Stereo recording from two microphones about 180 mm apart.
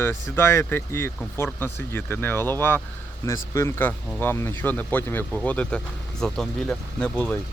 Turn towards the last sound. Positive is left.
turn(degrees=5)  # may be behind; listen again after turning